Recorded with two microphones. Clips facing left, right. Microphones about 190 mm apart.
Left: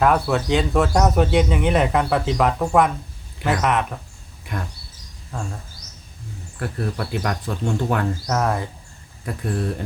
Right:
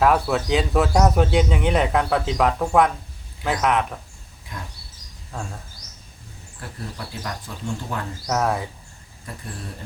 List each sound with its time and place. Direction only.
0.0 s speech: centre (ahead or behind)
6.6 s speech: 65° left (ahead or behind)
8.3 s speech: centre (ahead or behind)
9.2 s speech: 60° left (ahead or behind)